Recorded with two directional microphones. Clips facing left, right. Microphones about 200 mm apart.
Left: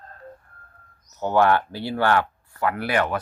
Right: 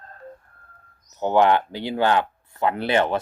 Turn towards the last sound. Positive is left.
turn(degrees=-25)  # may be behind; listen again after turning